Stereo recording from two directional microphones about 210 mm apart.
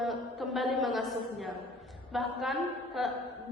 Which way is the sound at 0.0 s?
Centre (ahead or behind).